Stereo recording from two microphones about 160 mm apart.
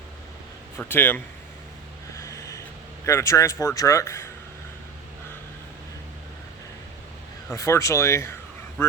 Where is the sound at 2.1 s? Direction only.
20° left (ahead or behind).